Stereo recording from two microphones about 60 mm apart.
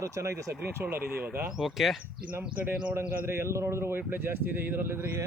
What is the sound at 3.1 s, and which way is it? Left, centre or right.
Speech, right.